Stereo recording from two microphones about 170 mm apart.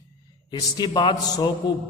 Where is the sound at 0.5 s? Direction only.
25° left (ahead or behind).